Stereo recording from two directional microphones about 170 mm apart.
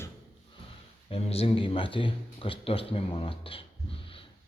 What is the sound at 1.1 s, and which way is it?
Speech, 35° left (ahead or behind).